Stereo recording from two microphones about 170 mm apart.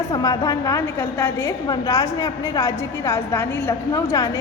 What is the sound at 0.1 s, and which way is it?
A woman's voice, 20° left (ahead or behind).